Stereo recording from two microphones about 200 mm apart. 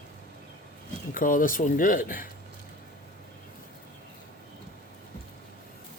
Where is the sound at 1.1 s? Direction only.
45° left (ahead or behind).